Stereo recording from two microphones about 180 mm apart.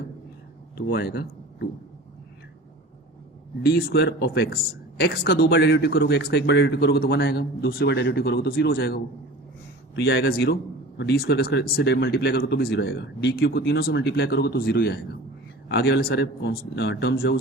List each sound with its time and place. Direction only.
0.8 s speech: 60° left (ahead or behind)
3.6 s speech: 60° left (ahead or behind)